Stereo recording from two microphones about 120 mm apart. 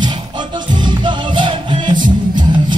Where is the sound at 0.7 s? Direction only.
40° right (ahead or behind).